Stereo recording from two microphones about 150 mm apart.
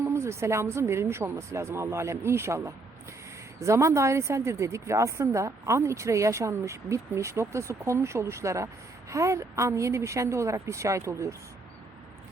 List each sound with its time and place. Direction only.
0.0 s speech: 15° right (ahead or behind)